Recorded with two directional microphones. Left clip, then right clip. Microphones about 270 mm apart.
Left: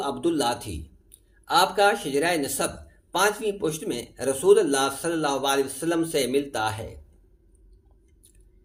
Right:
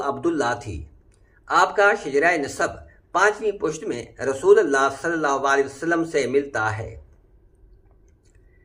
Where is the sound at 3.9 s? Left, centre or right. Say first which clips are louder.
Right 2 dB; left.